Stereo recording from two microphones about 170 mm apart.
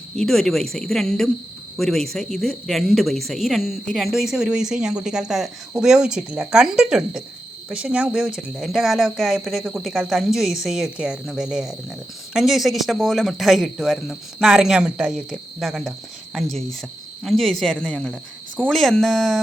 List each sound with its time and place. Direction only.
0.2 s a woman's voice: centre (ahead or behind)